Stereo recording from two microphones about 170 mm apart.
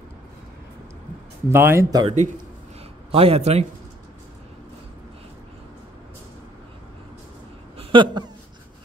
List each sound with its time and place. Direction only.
1.5 s speech: 15° right (ahead or behind)
2.0 s a man's voice: 45° right (ahead or behind)
7.7 s a sound: 30° right (ahead or behind)